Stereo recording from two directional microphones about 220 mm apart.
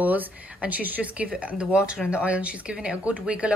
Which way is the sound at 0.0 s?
10° right (ahead or behind).